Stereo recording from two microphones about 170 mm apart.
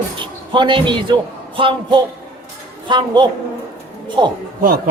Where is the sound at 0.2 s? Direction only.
30° right (ahead or behind).